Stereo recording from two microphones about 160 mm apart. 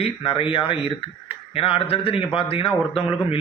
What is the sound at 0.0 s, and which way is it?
A man's voice, 35° left (ahead or behind).